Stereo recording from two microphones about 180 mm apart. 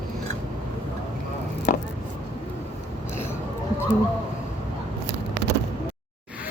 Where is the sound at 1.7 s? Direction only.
45° left (ahead or behind).